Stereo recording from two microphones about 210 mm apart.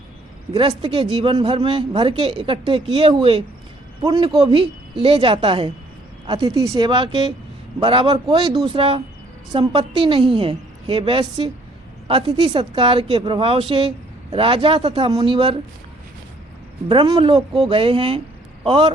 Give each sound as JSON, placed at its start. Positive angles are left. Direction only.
{"t": 0.8, "sound": "a woman's voice", "side_deg": -25}
{"t": 16.9, "sound": "a woman's voice", "side_deg": -25}